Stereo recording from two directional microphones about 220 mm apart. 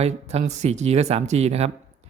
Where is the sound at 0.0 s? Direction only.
30° right (ahead or behind).